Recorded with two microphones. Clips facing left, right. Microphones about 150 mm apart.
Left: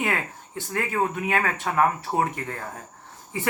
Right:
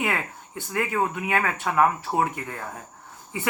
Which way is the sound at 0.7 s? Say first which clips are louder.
Even; 30° left (ahead or behind).